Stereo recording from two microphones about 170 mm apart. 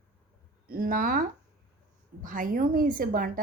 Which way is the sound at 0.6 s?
60° right (ahead or behind).